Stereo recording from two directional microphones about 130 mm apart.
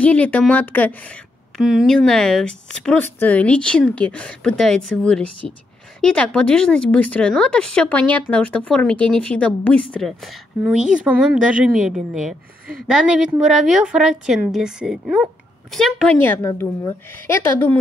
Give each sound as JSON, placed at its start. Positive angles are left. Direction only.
{"t": 0.0, "sound": "speech", "side_deg": 10}
{"t": 1.6, "sound": "a woman's voice", "side_deg": -5}
{"t": 10.6, "sound": "a woman's voice", "side_deg": -10}
{"t": 15.7, "sound": "speech", "side_deg": 5}
{"t": 16.4, "sound": "a woman's voice", "side_deg": 25}